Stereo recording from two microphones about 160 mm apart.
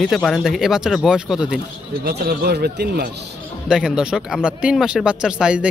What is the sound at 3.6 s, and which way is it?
Speech, 5° right (ahead or behind).